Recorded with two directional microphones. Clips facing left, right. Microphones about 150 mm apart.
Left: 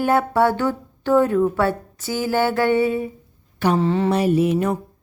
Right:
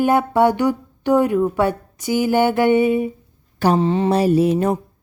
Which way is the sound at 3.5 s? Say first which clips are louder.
Right 2 dB; 35° right (ahead or behind).